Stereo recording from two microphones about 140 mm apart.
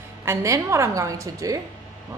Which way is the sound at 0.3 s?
20° right (ahead or behind).